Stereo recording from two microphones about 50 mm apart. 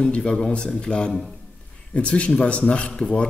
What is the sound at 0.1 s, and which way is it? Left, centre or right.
A man's voice, centre.